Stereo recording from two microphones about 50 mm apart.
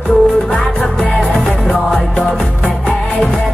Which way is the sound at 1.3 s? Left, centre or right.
Centre.